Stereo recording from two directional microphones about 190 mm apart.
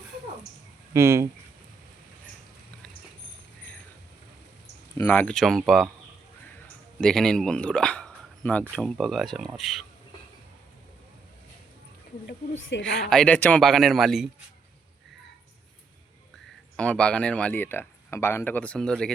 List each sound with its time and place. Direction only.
0.9 s speech: 15° right (ahead or behind)
4.9 s speech: 10° left (ahead or behind)
7.0 s speech: 5° left (ahead or behind)
12.8 s speech: 5° left (ahead or behind)
16.7 s speech: 5° left (ahead or behind)